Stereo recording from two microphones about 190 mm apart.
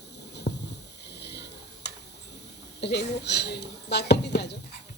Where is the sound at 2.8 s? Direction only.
60° left (ahead or behind).